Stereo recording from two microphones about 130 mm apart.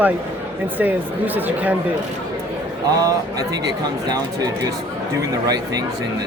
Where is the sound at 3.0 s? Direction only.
30° right (ahead or behind).